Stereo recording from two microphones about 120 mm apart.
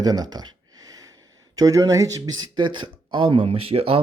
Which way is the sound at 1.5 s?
30° right (ahead or behind).